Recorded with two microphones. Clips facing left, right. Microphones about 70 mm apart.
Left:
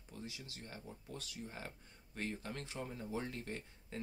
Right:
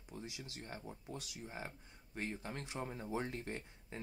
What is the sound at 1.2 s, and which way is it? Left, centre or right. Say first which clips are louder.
Speech: right 1 dB; centre.